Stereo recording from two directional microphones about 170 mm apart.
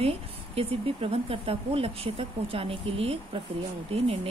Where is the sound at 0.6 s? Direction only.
35° right (ahead or behind).